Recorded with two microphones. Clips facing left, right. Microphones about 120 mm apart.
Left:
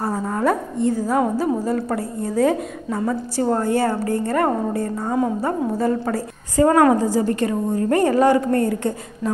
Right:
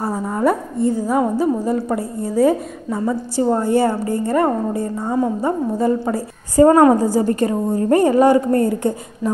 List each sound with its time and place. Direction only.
0.0 s a woman's voice: 10° right (ahead or behind)
5.4 s a woman's voice: 15° right (ahead or behind)
6.5 s a woman's voice: 25° right (ahead or behind)